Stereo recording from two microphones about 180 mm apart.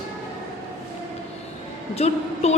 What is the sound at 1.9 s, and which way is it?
Speech, 35° left (ahead or behind).